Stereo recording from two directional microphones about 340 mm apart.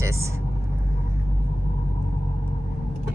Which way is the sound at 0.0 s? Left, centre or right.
Centre.